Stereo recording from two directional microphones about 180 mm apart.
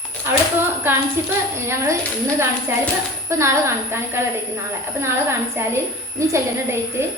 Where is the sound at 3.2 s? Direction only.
15° right (ahead or behind).